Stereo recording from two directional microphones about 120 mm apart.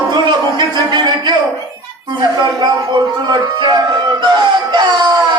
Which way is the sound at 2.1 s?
35° right (ahead or behind).